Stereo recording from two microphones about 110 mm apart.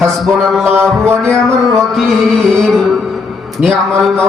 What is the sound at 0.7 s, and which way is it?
Music, 20° right (ahead or behind).